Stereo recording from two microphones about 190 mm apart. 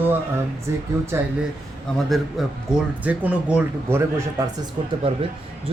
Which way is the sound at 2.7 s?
10° right (ahead or behind).